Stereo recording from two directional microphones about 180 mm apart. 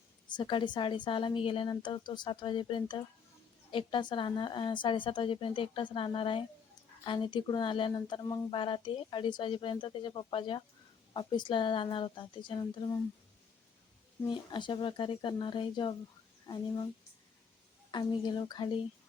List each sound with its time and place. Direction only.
0.3 s speech: 25° left (ahead or behind)
14.3 s speech: 25° left (ahead or behind)
17.9 s speech: 25° left (ahead or behind)